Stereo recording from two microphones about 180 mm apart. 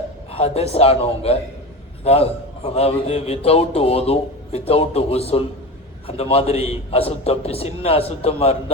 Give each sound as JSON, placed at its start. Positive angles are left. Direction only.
{"t": 0.3, "sound": "a man's voice", "side_deg": 35}